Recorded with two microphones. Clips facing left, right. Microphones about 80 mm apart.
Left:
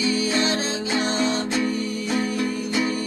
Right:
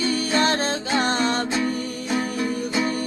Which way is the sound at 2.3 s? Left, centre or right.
Right.